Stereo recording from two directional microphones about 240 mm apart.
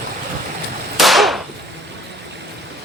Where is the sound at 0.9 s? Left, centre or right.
Centre.